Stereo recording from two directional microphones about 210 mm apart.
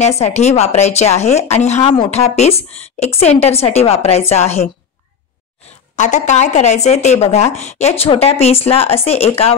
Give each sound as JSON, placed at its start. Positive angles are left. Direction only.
{"t": 0.0, "sound": "a woman's voice", "side_deg": 30}
{"t": 5.9, "sound": "speech", "side_deg": 35}